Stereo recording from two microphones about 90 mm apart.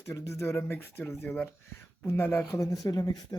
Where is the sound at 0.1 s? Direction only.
35° left (ahead or behind).